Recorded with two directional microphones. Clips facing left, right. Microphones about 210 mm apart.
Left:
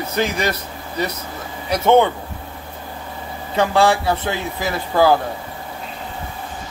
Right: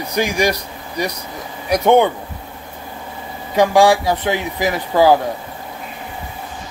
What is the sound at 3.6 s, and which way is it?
Speech, 15° right (ahead or behind).